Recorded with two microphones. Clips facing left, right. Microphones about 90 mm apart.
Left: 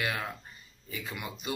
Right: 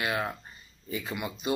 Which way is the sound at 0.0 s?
25° right (ahead or behind).